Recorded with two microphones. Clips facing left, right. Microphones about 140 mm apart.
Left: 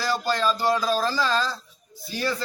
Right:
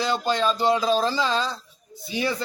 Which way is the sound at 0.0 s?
20° right (ahead or behind).